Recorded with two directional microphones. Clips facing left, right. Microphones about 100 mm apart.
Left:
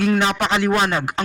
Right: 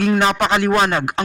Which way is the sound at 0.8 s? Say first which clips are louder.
Right 3 dB; 55° right (ahead or behind).